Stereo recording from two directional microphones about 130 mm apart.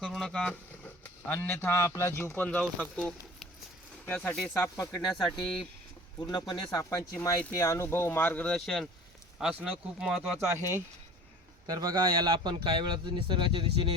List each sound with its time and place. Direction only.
0.0 s speech: 5° left (ahead or behind)
4.5 s speech: 25° left (ahead or behind)
8.5 s speech: centre (ahead or behind)
10.4 s a man's voice: 20° right (ahead or behind); by 13.9 s 40° right (ahead or behind)